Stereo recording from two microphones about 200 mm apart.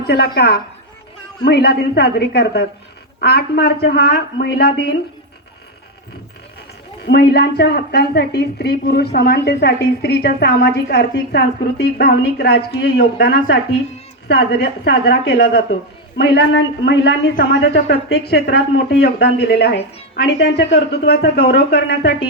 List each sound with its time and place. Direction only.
0.1 s a woman's voice: 55° left (ahead or behind)
7.0 s a woman's voice: 55° left (ahead or behind)